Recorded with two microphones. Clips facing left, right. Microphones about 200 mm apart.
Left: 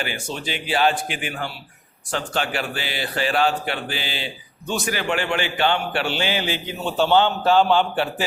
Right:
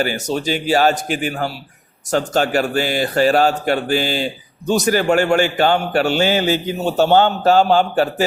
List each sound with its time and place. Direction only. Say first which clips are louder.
0.0 s speech: right 9 dB; 40° right (ahead or behind)